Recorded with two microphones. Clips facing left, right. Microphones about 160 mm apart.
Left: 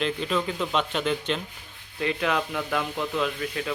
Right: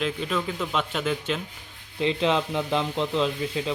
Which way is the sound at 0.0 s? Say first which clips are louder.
Left 1 dB; centre (ahead or behind).